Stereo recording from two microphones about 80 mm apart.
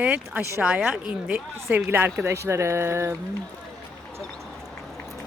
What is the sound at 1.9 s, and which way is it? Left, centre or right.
Speech, right.